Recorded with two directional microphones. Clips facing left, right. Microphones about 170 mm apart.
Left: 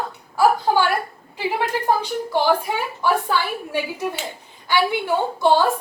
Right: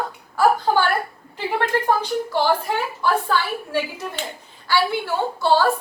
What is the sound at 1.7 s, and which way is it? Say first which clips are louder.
A woman's voice: right 1 dB; 15° left (ahead or behind).